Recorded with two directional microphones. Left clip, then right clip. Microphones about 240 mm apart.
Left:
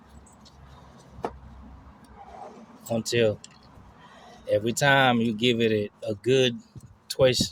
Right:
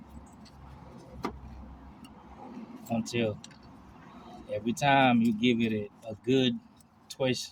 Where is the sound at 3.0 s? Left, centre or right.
Left.